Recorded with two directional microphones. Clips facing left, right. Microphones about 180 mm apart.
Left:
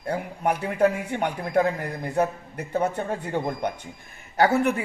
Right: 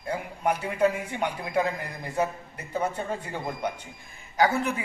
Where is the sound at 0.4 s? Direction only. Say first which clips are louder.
Left 2 dB; 55° left (ahead or behind).